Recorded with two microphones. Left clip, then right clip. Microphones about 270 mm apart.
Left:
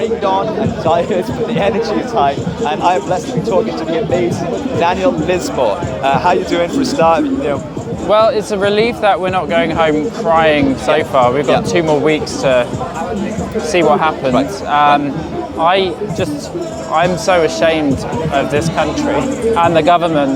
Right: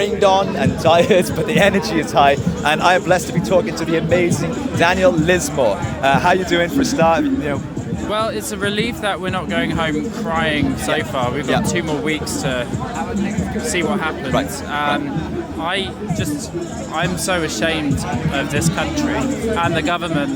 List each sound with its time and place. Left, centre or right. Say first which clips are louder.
0.0 s a man's voice: even; right
4.8 s a man's voice: even; right
5.5 s speech: left 3 dB; right
8.1 s speech: left 10 dB; centre
13.7 s speech: left 10 dB; left
16.9 s speech: left 8 dB; centre